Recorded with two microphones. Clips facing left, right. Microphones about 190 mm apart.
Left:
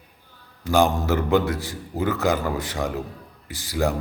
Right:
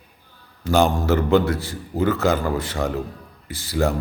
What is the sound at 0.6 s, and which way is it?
A man's voice, 15° left (ahead or behind).